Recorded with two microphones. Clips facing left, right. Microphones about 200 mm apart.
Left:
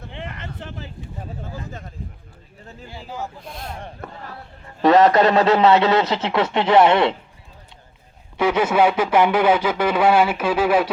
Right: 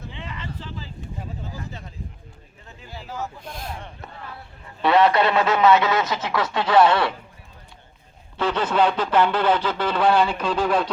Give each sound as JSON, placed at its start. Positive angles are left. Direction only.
{"t": 0.1, "sound": "a sound", "side_deg": 60}
{"t": 1.5, "sound": "a sound", "side_deg": 50}
{"t": 2.9, "sound": "speech", "side_deg": 15}
{"t": 3.4, "sound": "speech", "side_deg": 0}
{"t": 3.8, "sound": "a man's voice", "side_deg": 50}
{"t": 8.4, "sound": "speech", "side_deg": 10}